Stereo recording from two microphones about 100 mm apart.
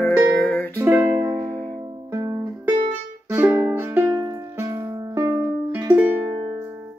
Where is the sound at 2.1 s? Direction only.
30° right (ahead or behind).